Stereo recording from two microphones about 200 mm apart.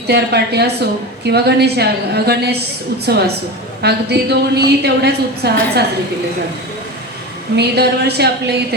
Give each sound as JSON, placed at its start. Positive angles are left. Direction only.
{"t": 0.1, "sound": "a woman's voice", "side_deg": -55}
{"t": 7.5, "sound": "a woman's voice", "side_deg": -55}